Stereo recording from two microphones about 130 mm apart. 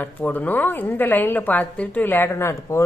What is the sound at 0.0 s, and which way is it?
A woman's voice, 15° left (ahead or behind).